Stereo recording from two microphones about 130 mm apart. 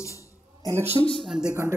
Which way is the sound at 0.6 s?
20° right (ahead or behind).